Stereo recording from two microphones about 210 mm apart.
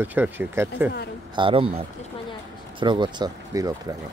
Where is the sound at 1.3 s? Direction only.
25° right (ahead or behind).